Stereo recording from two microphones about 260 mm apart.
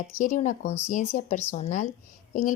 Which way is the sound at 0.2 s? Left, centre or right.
Left.